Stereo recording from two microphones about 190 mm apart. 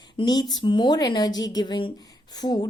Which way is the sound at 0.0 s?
20° left (ahead or behind).